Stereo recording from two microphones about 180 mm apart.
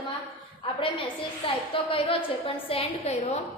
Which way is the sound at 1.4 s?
30° left (ahead or behind).